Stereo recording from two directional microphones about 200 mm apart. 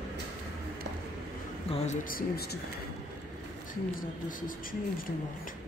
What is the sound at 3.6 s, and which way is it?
Speech, 40° left (ahead or behind).